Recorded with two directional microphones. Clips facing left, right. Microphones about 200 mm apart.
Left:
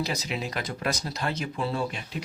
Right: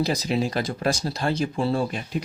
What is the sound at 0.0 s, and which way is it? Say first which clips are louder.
Speech: right 7 dB; 35° right (ahead or behind).